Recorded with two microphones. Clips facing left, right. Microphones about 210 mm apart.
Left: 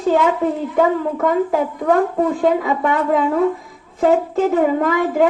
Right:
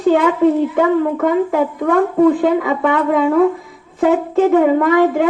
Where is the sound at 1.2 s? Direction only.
55° right (ahead or behind).